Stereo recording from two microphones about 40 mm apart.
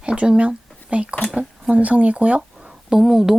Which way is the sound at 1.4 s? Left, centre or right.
Centre.